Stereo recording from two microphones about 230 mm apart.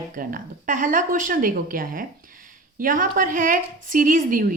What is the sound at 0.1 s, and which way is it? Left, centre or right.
A woman's voice, right.